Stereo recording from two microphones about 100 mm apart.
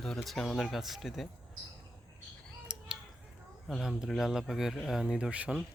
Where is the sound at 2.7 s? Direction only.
10° right (ahead or behind).